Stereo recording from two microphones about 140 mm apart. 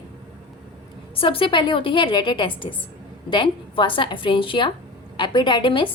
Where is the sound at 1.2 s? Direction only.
40° left (ahead or behind).